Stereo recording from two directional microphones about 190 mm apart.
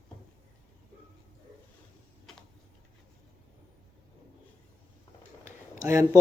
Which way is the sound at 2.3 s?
Centre (ahead or behind).